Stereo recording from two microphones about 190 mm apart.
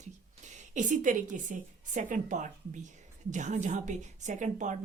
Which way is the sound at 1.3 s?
40° right (ahead or behind).